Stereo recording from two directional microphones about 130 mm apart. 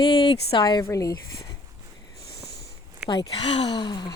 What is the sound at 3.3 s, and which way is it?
Speech, 40° left (ahead or behind).